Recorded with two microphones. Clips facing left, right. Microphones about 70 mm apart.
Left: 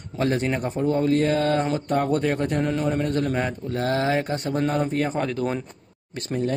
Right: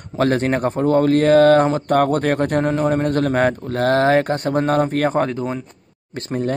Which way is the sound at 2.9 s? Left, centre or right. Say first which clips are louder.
Right 5 dB; right.